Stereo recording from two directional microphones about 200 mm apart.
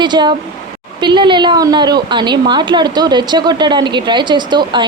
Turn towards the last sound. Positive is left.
turn(degrees=-20)  # may be behind; listen again after turning